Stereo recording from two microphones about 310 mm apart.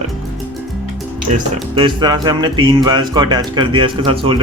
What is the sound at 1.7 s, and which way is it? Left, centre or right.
Speech, centre.